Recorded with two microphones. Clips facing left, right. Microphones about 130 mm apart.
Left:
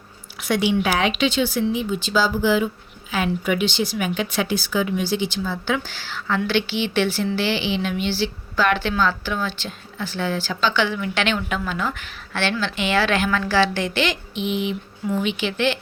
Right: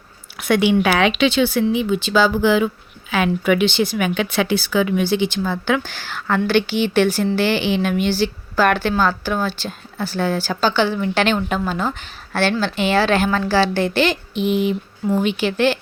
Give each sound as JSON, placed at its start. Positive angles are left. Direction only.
{"t": 0.3, "sound": "speech", "side_deg": -55}